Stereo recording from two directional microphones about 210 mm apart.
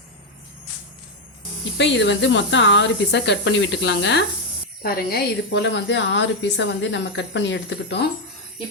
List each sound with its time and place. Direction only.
1.8 s a woman's voice: 60° left (ahead or behind)
4.8 s a woman's voice: 45° left (ahead or behind)